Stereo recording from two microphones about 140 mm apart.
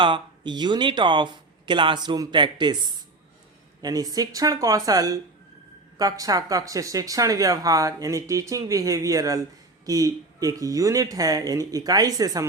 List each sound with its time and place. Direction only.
0.0 s speech: 35° right (ahead or behind)